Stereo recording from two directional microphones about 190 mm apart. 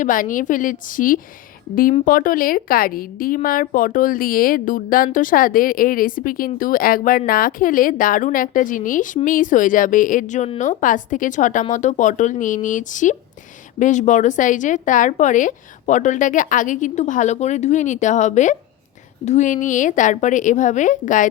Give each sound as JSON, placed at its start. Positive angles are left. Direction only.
{"t": 0.0, "sound": "a woman's voice", "side_deg": 45}